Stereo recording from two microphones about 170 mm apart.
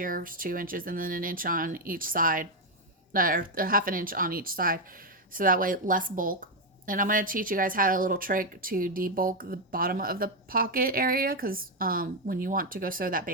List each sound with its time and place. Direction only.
0.0 s a woman's voice: 55° right (ahead or behind)